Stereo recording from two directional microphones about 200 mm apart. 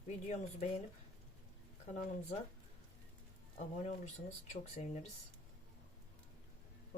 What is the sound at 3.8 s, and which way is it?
Speech, 35° left (ahead or behind).